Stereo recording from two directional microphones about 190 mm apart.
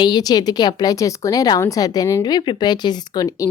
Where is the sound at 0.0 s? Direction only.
20° left (ahead or behind).